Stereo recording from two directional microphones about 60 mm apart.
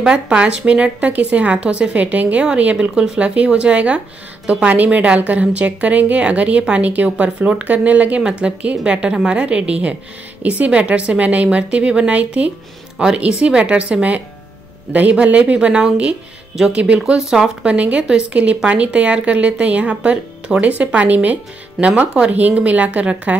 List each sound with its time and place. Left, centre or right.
0.0 s speech: centre
17.7 s speech: right